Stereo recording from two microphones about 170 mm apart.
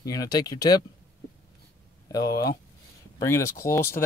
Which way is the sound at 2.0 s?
20° left (ahead or behind).